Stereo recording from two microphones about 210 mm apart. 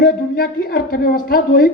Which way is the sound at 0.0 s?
45° left (ahead or behind).